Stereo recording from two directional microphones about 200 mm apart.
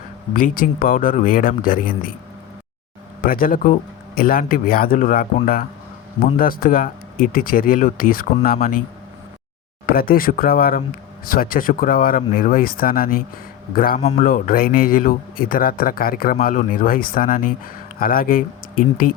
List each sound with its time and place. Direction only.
0.3 s a man's voice: 45° left (ahead or behind)
3.2 s a man's voice: 45° left (ahead or behind)
9.8 s a man's voice: 45° left (ahead or behind)
14.0 s speech: 30° left (ahead or behind)
14.3 s a man's voice: 45° left (ahead or behind)